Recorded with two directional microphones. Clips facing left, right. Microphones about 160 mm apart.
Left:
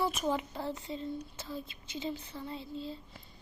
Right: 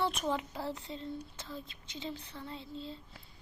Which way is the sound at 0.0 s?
5° left (ahead or behind).